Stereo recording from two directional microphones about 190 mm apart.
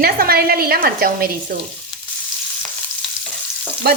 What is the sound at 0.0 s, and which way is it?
A woman's voice, 50° right (ahead or behind).